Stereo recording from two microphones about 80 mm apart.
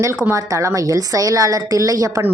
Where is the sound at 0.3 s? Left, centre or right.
Right.